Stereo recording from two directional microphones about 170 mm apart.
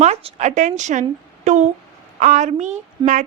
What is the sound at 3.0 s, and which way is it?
Speech, 25° right (ahead or behind).